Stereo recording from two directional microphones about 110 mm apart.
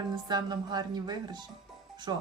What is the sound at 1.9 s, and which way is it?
Music, 40° right (ahead or behind).